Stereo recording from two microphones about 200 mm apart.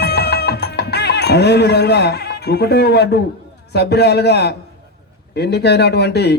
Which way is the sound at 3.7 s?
55° left (ahead or behind).